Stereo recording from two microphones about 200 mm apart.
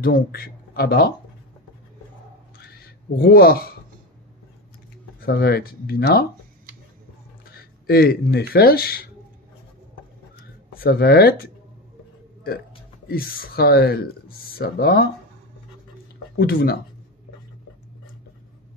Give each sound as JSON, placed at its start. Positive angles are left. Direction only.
{"t": 0.0, "sound": "speech", "side_deg": 50}
{"t": 2.5, "sound": "a sound", "side_deg": 50}
{"t": 5.2, "sound": "speech", "side_deg": 55}
{"t": 7.8, "sound": "speech", "side_deg": 50}
{"t": 10.7, "sound": "speech", "side_deg": 50}
{"t": 13.1, "sound": "speech", "side_deg": 50}
{"t": 16.3, "sound": "speech", "side_deg": 50}